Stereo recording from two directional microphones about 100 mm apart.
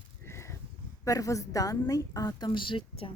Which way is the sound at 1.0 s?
35° left (ahead or behind).